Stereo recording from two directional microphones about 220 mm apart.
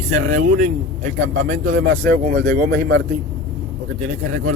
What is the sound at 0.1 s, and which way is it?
A man's voice, 35° right (ahead or behind).